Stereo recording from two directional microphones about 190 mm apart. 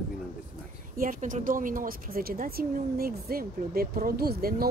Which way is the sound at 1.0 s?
45° right (ahead or behind).